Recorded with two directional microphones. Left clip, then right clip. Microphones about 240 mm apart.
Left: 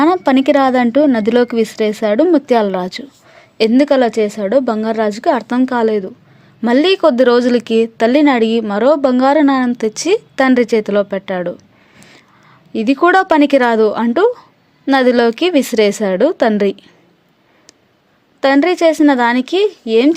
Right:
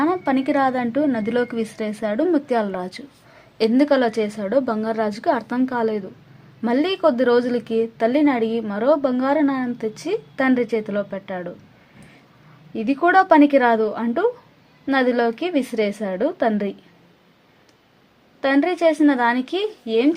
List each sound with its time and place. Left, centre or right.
0.0 s speech: left
11.9 s vehicle: left
12.7 s speech: left
18.3 s speech: left